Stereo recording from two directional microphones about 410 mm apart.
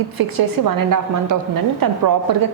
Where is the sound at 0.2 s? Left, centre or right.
Right.